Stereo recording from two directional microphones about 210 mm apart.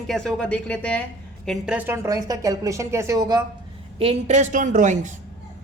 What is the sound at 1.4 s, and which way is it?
A woman's voice, 5° right (ahead or behind).